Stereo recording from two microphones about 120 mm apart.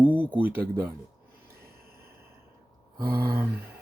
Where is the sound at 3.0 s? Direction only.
20° right (ahead or behind).